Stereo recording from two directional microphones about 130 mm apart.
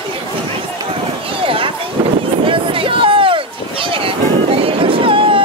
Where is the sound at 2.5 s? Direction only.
40° right (ahead or behind).